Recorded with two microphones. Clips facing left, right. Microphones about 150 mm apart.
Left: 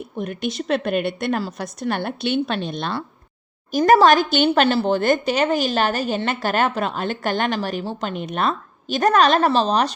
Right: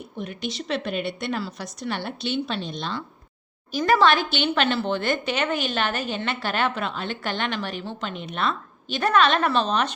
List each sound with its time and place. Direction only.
0.2 s a woman's voice: 50° left (ahead or behind)
3.7 s speech: 45° left (ahead or behind)